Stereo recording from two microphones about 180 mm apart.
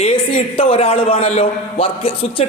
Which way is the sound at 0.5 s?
30° left (ahead or behind).